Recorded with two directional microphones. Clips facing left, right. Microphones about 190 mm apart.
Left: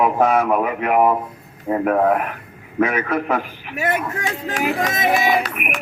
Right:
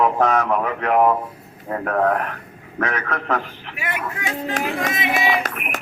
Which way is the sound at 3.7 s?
45° left (ahead or behind).